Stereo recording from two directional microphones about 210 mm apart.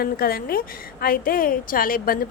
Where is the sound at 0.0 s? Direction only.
45° left (ahead or behind).